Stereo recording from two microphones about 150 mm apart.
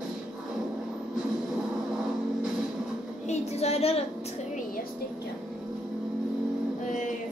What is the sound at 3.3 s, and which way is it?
Speech, 45° left (ahead or behind).